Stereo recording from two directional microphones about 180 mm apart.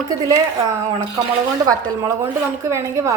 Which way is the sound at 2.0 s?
15° right (ahead or behind).